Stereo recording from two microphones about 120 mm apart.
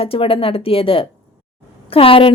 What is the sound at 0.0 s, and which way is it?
Speech, 50° left (ahead or behind).